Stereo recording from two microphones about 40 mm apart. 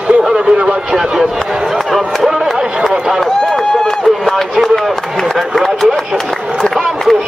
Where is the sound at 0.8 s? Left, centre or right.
Centre.